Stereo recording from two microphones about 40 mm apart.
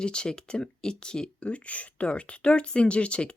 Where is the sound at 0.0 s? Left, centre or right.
Left.